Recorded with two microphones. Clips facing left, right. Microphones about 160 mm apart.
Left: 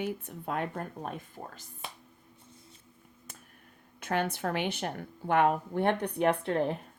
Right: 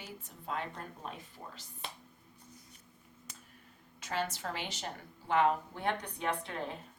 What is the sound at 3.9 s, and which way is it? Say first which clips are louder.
A woman's voice: left 6 dB; 55° left (ahead or behind).